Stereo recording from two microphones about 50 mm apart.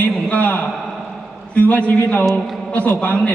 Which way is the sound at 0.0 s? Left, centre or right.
Left.